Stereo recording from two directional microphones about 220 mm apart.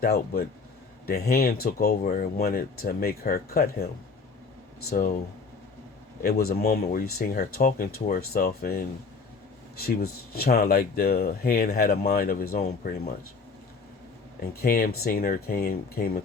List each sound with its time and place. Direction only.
0.0 s speech: 45° left (ahead or behind)
4.9 s speech: 40° left (ahead or behind)
6.2 s speech: 45° left (ahead or behind)
14.6 s speech: 40° left (ahead or behind)